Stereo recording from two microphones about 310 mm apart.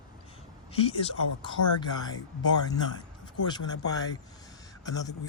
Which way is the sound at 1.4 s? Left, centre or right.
Centre.